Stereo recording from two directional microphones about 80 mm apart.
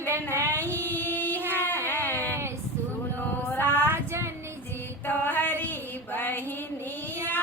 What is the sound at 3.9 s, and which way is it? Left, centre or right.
Child singing, right.